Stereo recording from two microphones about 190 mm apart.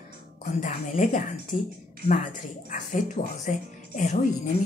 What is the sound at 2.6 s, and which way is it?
Speech, 40° left (ahead or behind).